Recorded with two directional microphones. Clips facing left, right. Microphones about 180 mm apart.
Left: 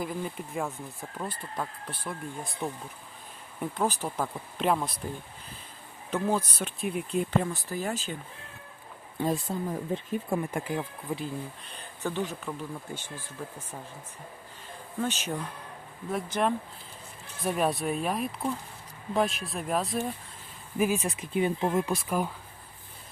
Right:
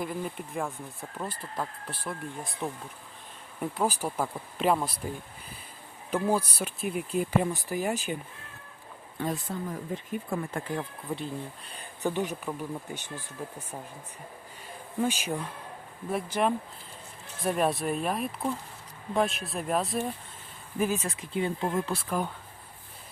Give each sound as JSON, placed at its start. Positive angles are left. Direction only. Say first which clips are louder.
{"t": 0.0, "sound": "speech", "louder": "even", "side_deg": 0}
{"t": 6.1, "sound": "speech", "louder": "right 1 dB", "side_deg": -10}
{"t": 7.4, "sound": "speech", "louder": "right 3 dB", "side_deg": -15}
{"t": 9.2, "sound": "speech", "louder": "left 3 dB", "side_deg": 20}
{"t": 12.0, "sound": "speech", "louder": "right 2 dB", "side_deg": -15}
{"t": 15.0, "sound": "speech", "louder": "right 2 dB", "side_deg": -10}
{"t": 20.7, "sound": "speech", "louder": "left 2 dB", "side_deg": 10}